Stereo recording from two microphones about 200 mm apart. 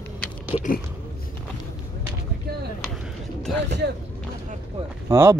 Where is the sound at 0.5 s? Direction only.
30° left (ahead or behind).